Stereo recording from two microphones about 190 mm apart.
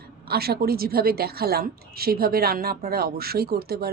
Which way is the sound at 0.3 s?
55° right (ahead or behind).